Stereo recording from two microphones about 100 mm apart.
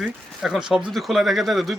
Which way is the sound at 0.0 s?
5° right (ahead or behind).